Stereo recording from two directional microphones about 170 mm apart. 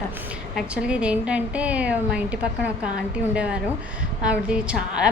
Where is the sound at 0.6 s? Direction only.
5° right (ahead or behind).